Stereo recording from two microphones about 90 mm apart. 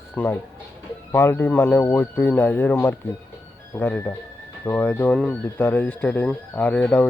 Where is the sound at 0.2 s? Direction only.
15° left (ahead or behind).